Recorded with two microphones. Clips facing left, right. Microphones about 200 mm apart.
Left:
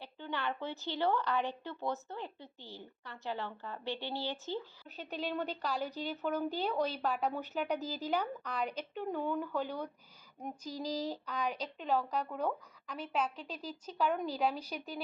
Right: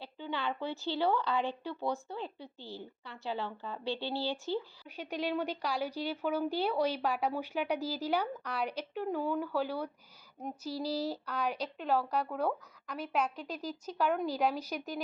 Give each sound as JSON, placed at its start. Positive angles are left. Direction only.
{"t": 0.2, "sound": "a woman's voice", "side_deg": -15}
{"t": 0.7, "sound": "speech", "side_deg": 15}
{"t": 0.9, "sound": "speech", "side_deg": -15}
{"t": 2.4, "sound": "speech", "side_deg": 15}
{"t": 3.0, "sound": "speech", "side_deg": -15}
{"t": 4.0, "sound": "speech", "side_deg": 15}
{"t": 4.5, "sound": "speech", "side_deg": -10}